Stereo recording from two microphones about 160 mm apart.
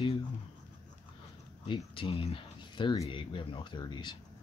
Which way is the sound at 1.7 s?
30° left (ahead or behind).